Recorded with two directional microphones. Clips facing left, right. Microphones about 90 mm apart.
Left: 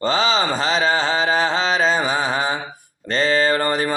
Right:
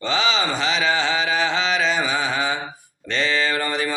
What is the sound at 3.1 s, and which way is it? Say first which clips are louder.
Mantra: left 4 dB; 40° left (ahead or behind).